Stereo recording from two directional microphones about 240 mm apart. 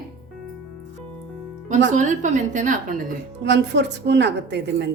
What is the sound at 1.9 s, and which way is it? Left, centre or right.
A woman's voice, right.